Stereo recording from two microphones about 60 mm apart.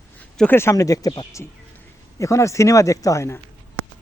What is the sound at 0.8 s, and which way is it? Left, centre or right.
Speech, left.